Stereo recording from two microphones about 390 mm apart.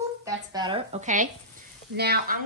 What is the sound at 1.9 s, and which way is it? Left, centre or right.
Frying, right.